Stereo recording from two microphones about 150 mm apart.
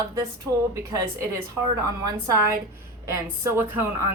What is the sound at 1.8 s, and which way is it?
A woman's voice, 25° right (ahead or behind).